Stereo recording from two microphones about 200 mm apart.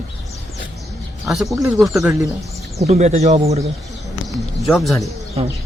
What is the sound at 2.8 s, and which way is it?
Speech, 30° right (ahead or behind).